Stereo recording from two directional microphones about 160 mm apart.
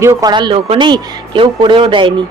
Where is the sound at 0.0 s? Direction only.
20° right (ahead or behind).